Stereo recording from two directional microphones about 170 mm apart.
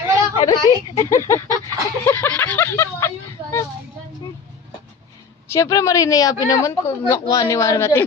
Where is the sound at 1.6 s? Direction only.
15° left (ahead or behind).